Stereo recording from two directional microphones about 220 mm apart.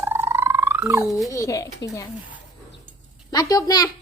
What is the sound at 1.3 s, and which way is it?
Speech, 15° left (ahead or behind).